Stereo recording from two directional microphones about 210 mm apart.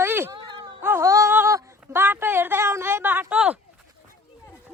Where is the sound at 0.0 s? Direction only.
10° right (ahead or behind).